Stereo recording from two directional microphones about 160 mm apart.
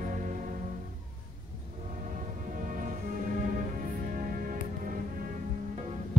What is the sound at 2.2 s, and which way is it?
Music, 55° right (ahead or behind).